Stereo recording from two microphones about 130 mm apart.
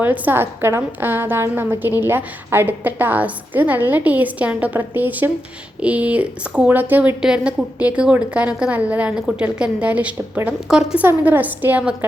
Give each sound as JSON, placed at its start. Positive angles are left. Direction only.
{"t": 0.0, "sound": "a woman's voice", "side_deg": -15}